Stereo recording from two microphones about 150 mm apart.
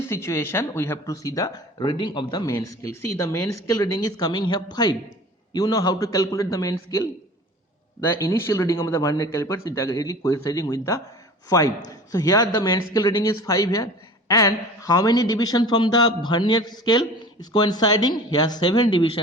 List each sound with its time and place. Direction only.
0.1 s speech: 15° left (ahead or behind); by 19.2 s 35° left (ahead or behind)